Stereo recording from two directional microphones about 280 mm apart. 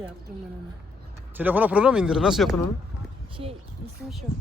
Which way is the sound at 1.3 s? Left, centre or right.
Centre.